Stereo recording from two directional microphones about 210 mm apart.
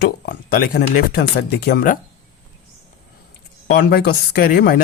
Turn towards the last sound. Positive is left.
turn(degrees=45)  # may be behind; listen again after turning